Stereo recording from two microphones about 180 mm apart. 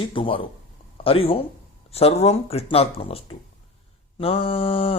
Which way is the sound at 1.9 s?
35° left (ahead or behind).